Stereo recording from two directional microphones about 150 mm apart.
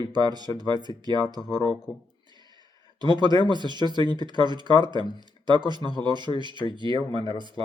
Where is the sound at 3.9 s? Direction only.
30° right (ahead or behind).